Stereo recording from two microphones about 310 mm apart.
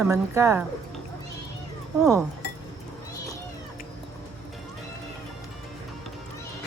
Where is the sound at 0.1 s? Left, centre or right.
Centre.